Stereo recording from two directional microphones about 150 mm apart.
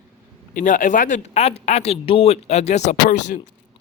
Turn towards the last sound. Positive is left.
turn(degrees=50)  # may be behind; listen again after turning